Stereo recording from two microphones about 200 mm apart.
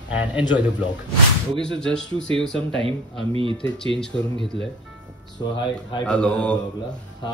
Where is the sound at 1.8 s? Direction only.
5° left (ahead or behind).